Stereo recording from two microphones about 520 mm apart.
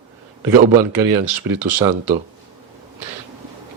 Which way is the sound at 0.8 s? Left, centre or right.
Right.